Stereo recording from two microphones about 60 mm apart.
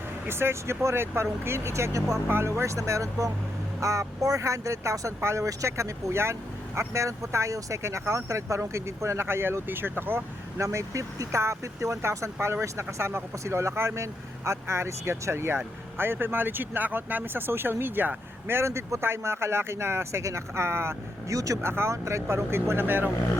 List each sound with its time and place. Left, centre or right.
0.3 s speech: right
2.2 s speech: right
10.6 s speech: right
18.4 s speech: right
21.3 s speech: right
21.6 s speech: right